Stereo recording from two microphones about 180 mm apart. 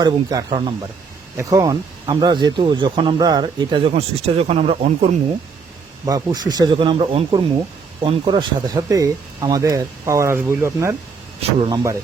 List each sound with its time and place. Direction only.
0.0 s speech: 20° right (ahead or behind)
6.1 s speech: 20° right (ahead or behind)
11.3 s speech: 35° right (ahead or behind)
11.7 s speech: 20° right (ahead or behind)